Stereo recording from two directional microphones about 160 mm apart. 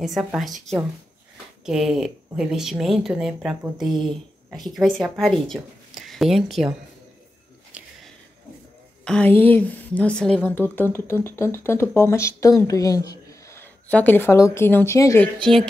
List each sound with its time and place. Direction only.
0.0 s a woman's voice: 5° right (ahead or behind)
7.7 s a sound: 10° right (ahead or behind)
9.0 s speech: 5° left (ahead or behind)
15.4 s a woman's voice: 5° left (ahead or behind)